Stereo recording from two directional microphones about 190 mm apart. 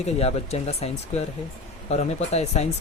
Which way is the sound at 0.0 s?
35° left (ahead or behind).